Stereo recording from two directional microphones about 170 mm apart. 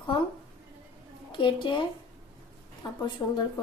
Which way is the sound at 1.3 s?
30° left (ahead or behind).